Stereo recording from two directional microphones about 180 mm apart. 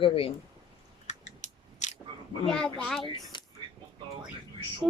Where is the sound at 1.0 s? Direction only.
40° left (ahead or behind).